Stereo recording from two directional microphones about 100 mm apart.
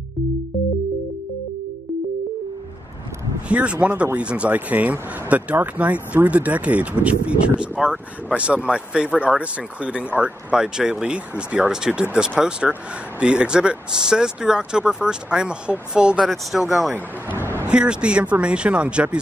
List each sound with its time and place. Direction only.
3.4 s speech: 10° right (ahead or behind)
16.9 s speech: 20° right (ahead or behind)